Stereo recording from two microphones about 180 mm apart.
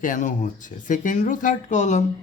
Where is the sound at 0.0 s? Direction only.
45° left (ahead or behind).